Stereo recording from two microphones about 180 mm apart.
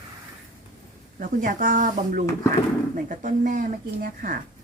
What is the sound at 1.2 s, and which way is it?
Speech, 45° right (ahead or behind).